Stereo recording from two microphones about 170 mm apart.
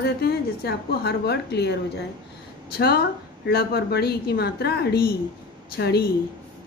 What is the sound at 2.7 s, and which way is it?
A woman's voice, 70° left (ahead or behind).